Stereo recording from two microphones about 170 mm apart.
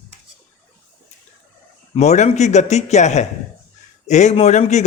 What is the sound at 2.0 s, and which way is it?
Speech, 40° left (ahead or behind).